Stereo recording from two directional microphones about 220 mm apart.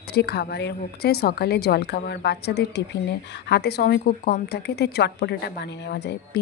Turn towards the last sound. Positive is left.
turn(degrees=50)  # may be behind; listen again after turning